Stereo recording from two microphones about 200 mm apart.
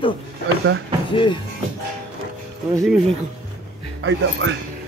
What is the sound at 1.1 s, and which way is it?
Speech, 25° left (ahead or behind).